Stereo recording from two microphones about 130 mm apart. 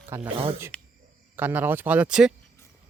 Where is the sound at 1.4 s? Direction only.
15° right (ahead or behind).